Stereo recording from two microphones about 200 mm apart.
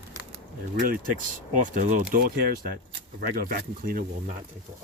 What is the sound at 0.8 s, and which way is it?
Speech, 45° right (ahead or behind).